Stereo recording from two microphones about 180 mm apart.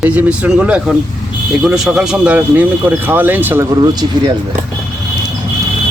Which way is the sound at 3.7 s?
20° right (ahead or behind).